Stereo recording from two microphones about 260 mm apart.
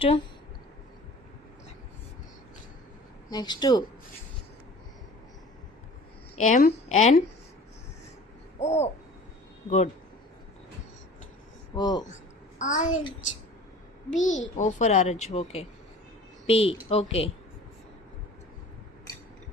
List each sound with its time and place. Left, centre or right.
3.2 s speech: centre
6.3 s a woman's voice: left
8.5 s a sound: left
9.6 s a woman's voice: left
11.7 s speech: centre
12.0 s a child's voice: left
14.2 s a woman's voice: left